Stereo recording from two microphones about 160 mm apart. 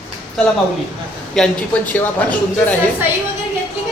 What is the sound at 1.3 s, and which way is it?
A man's voice, 5° left (ahead or behind).